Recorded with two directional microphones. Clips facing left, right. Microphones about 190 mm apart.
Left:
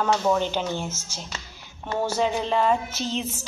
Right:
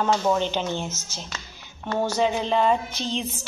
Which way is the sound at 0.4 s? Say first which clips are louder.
Even; 10° left (ahead or behind).